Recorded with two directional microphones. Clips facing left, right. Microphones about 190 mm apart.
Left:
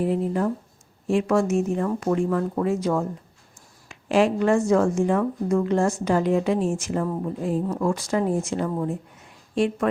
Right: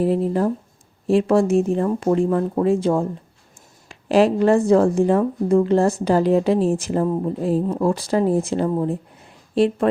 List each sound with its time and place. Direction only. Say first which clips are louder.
0.0 s speech: right 4 dB; 35° right (ahead or behind)